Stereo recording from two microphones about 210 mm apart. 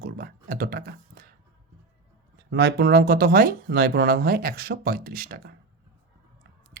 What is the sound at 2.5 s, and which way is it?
Speech, 50° right (ahead or behind).